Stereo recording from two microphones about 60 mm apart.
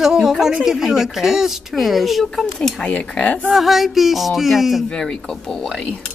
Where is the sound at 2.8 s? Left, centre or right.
Centre.